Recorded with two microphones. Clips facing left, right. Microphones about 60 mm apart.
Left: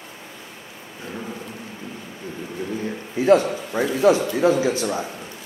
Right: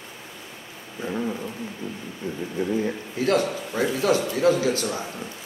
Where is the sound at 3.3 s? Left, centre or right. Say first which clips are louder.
Left 6 dB; centre.